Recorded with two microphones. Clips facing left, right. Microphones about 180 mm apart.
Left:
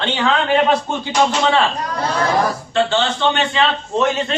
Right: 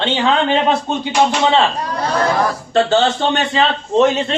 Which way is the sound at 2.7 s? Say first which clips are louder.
Right 5 dB; 40° right (ahead or behind).